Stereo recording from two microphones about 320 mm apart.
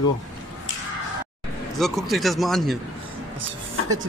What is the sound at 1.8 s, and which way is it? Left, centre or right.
Speech, centre.